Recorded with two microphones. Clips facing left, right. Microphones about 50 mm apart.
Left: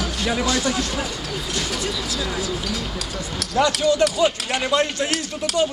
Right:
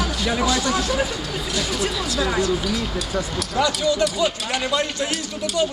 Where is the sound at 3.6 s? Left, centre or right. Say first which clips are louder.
Left 2 dB; left.